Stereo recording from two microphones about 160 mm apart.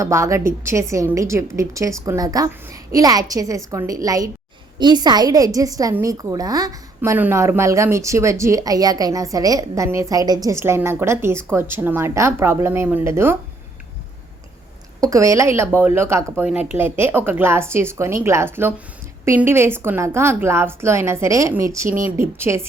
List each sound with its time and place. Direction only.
0.0 s a woman's voice: 20° right (ahead or behind)
15.0 s a woman's voice: 20° right (ahead or behind)